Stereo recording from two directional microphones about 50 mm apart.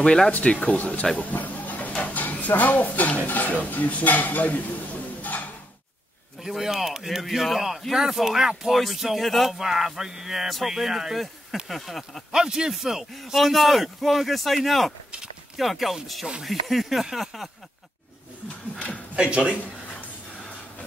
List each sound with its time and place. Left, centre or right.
0.0 s speech: centre
1.1 s a sound: left
1.9 s speech: left
6.4 s speech: centre
11.5 s a sound: centre
12.3 s speech: centre
19.1 s speech: centre